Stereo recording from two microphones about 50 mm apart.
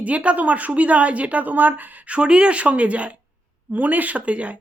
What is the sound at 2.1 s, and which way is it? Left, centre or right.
A woman's voice, centre.